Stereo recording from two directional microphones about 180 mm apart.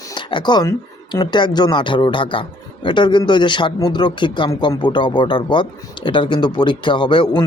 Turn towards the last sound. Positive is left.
turn(degrees=25)  # may be behind; listen again after turning